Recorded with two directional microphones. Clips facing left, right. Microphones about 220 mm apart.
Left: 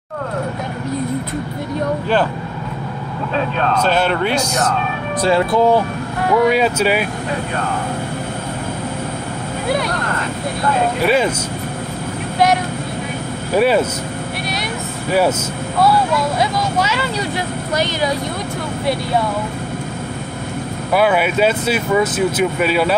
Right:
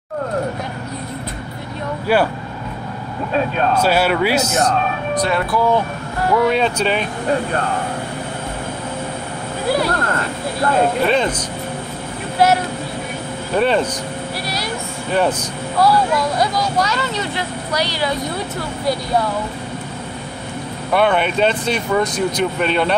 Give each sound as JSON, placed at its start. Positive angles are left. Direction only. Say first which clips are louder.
{"t": 3.5, "sound": "speech", "louder": "even", "side_deg": -10}
{"t": 5.2, "sound": "speech", "louder": "left 6 dB", "side_deg": 30}
{"t": 6.3, "sound": "speech", "louder": "left 2 dB", "side_deg": 5}
{"t": 11.1, "sound": "speech", "louder": "left 2 dB", "side_deg": 5}
{"t": 13.6, "sound": "speech", "louder": "left 2 dB", "side_deg": 5}
{"t": 15.0, "sound": "speech", "louder": "left 2 dB", "side_deg": 5}
{"t": 20.9, "sound": "speech", "louder": "left 1 dB", "side_deg": 5}